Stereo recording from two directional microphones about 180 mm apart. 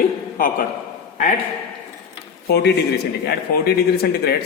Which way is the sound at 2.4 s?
65° left (ahead or behind).